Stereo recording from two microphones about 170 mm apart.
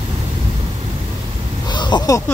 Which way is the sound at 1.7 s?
25° left (ahead or behind).